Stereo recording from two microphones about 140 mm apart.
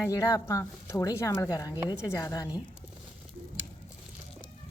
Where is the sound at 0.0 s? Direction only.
25° left (ahead or behind).